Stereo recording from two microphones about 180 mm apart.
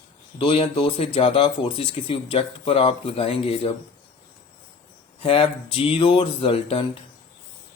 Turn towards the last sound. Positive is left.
turn(degrees=30)  # may be behind; listen again after turning